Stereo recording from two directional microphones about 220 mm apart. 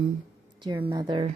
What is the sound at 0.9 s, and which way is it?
Speech, 20° right (ahead or behind).